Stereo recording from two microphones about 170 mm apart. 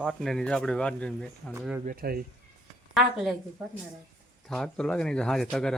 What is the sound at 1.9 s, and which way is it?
Speech, 60° right (ahead or behind).